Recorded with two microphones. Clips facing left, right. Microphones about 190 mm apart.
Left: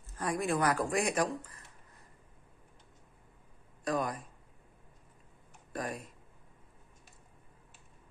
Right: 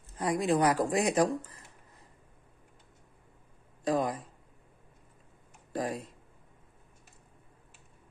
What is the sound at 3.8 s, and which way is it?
Speech, 25° right (ahead or behind).